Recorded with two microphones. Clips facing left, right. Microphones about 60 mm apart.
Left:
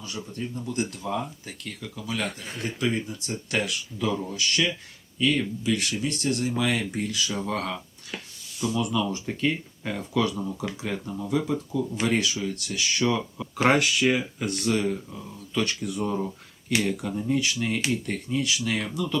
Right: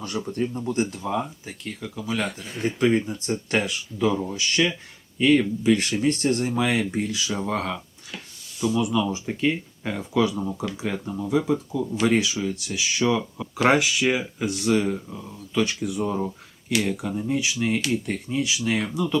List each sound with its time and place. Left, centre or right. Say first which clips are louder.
0.2 s speech: right 9 dB; right
0.5 s speech: right 4 dB; right; by 2.3 s centre
2.8 s speech: right 7 dB; right
3.9 s speech: right 5 dB; centre; by 6.5 s right
6.6 s speech: right 3 dB; right
7.3 s speech: right 3 dB; centre
11.5 s speech: right 2 dB; centre